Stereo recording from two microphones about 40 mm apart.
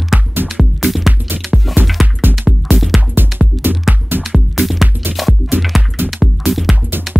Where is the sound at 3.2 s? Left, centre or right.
Right.